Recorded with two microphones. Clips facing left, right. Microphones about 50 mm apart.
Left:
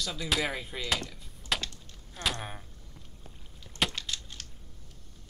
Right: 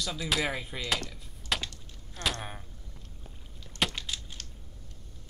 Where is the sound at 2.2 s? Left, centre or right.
Centre.